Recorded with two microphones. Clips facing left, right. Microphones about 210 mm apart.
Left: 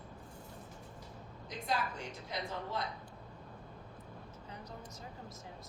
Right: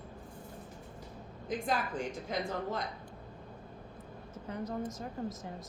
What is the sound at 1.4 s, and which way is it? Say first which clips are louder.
A woman's voice: right 4 dB; 50° right (ahead or behind).